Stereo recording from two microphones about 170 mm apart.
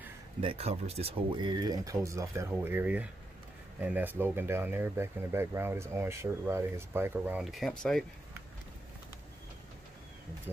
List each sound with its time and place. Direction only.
0.4 s speech: 35° right (ahead or behind); by 7.4 s 10° right (ahead or behind)
7.5 s speech: 5° left (ahead or behind)